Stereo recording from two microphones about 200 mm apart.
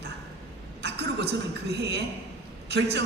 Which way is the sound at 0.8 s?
55° right (ahead or behind).